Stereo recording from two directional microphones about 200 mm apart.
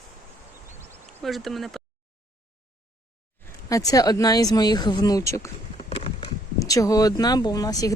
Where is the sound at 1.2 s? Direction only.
Centre (ahead or behind).